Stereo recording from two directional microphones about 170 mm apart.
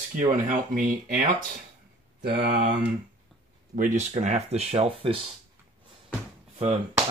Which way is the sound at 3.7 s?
45° right (ahead or behind).